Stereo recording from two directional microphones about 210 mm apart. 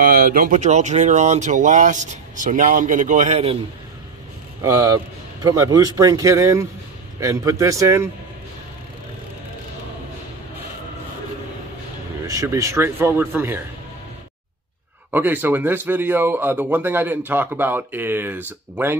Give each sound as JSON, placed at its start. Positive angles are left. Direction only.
{"t": 0.0, "sound": "speech", "side_deg": -40}
{"t": 4.6, "sound": "speech", "side_deg": -15}
{"t": 12.3, "sound": "speech", "side_deg": -15}
{"t": 15.0, "sound": "speech", "side_deg": -10}